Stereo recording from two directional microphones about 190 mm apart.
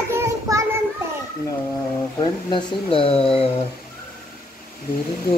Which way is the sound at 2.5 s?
30° left (ahead or behind).